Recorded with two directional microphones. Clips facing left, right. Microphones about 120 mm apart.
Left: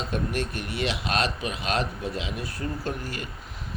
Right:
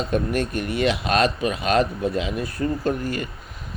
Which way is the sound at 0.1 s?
50° right (ahead or behind).